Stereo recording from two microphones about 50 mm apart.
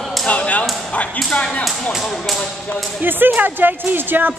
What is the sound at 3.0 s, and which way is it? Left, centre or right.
Speech, right.